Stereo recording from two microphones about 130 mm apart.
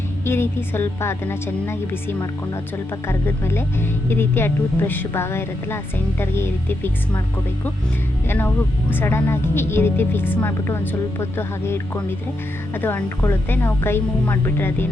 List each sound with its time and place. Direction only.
0.3 s a woman's voice: 20° left (ahead or behind)
8.3 s a woman's voice: 15° left (ahead or behind)